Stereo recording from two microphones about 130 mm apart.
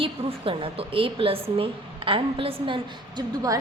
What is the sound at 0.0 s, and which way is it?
A woman's voice, 45° right (ahead or behind).